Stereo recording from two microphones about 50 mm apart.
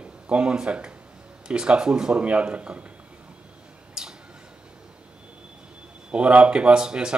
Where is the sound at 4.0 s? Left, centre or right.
Centre.